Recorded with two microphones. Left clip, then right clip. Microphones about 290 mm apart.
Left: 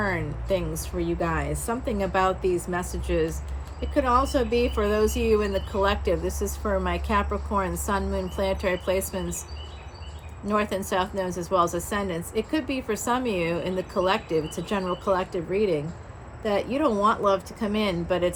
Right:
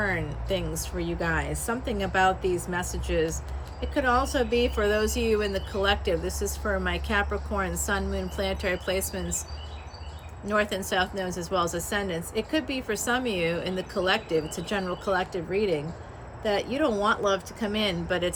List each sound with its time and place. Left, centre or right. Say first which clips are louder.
0.0 s a woman's voice: left 1 dB; centre
10.5 s a woman's voice: left 1 dB; centre